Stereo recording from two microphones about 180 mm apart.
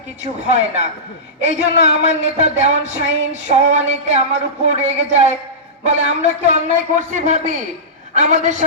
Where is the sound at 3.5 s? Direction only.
40° right (ahead or behind).